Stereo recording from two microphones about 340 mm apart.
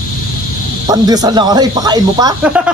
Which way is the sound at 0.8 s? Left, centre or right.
Centre.